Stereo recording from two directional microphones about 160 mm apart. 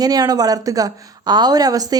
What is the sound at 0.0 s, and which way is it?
A woman's voice, 25° right (ahead or behind).